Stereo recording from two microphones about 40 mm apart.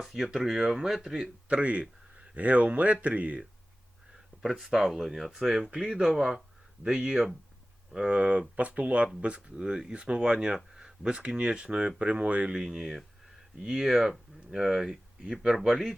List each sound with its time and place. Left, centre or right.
0.0 s speech: centre
1.5 s speech: right
4.4 s speech: centre; by 6.1 s right
6.1 s speech: centre
8.1 s speech: right
9.6 s speech: right
12.5 s speech: centre